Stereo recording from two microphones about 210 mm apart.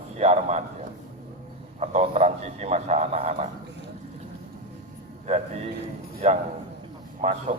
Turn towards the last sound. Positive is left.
turn(degrees=-35)  # may be behind; listen again after turning